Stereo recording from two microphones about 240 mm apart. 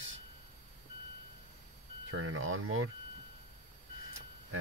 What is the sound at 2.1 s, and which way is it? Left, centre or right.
Speech, right.